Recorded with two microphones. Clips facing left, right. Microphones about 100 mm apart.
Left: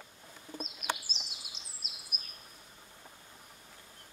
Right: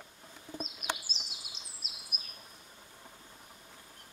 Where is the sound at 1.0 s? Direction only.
Centre (ahead or behind).